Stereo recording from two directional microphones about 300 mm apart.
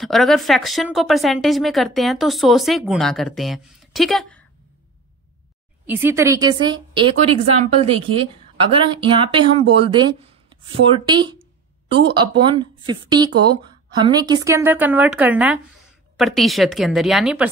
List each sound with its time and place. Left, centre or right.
0.0 s speech: centre
5.9 s speech: centre
11.1 s speech: centre